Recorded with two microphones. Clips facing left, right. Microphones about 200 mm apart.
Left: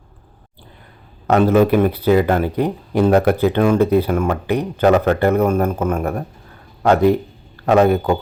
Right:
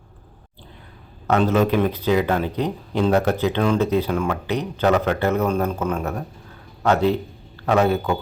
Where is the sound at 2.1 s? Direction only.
50° left (ahead or behind).